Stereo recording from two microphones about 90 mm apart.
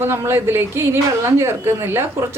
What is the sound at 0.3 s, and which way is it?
A woman's voice, 30° right (ahead or behind).